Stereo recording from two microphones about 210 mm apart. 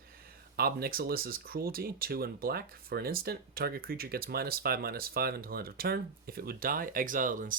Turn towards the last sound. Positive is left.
turn(degrees=-40)  # may be behind; listen again after turning